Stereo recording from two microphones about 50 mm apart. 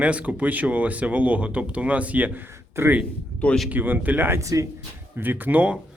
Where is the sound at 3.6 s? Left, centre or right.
Right.